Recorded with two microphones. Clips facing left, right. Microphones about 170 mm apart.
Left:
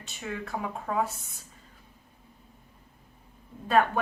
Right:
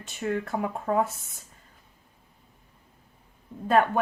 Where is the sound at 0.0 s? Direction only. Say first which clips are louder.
Right 7 dB; 50° right (ahead or behind).